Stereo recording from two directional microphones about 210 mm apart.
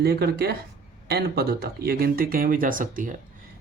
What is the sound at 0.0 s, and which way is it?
Speech, 50° right (ahead or behind).